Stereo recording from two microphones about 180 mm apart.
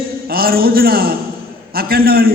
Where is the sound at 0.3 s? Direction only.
55° right (ahead or behind).